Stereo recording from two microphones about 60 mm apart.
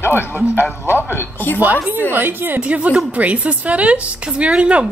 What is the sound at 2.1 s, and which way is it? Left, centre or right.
Speech, right.